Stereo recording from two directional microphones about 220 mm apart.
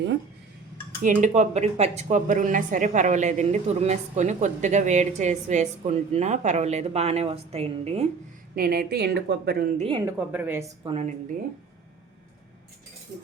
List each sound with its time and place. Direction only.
1.0 s speech: 35° right (ahead or behind)
8.5 s speech: 45° right (ahead or behind)
10.0 s a woman's voice: 10° right (ahead or behind)
10.8 s a woman's voice: 30° right (ahead or behind)